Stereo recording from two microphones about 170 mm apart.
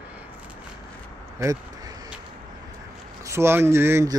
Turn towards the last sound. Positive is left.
turn(degrees=-15)  # may be behind; listen again after turning